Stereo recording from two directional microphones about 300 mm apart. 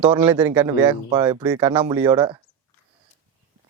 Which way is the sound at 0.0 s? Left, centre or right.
Centre.